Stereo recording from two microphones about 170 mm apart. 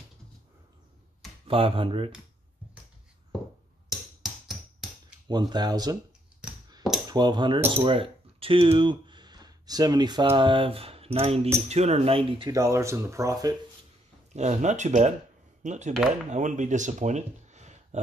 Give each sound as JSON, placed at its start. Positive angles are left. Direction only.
{"t": 1.5, "sound": "speech", "side_deg": -30}
{"t": 4.2, "sound": "a sound", "side_deg": 0}
{"t": 5.3, "sound": "speech", "side_deg": -25}
{"t": 7.1, "sound": "speech", "side_deg": -25}
{"t": 12.4, "sound": "speech", "side_deg": -20}
{"t": 14.3, "sound": "speech", "side_deg": -40}